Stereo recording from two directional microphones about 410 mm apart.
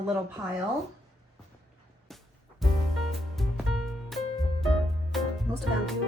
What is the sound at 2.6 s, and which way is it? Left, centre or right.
Music, centre.